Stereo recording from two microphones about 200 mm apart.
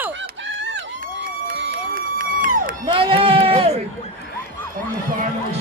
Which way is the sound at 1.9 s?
45° right (ahead or behind).